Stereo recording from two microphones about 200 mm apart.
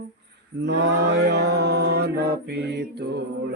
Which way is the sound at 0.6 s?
60° right (ahead or behind).